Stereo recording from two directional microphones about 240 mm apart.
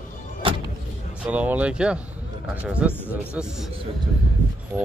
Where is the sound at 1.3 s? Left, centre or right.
Centre.